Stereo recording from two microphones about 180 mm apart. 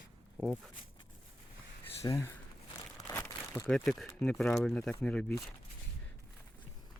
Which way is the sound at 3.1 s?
15° left (ahead or behind).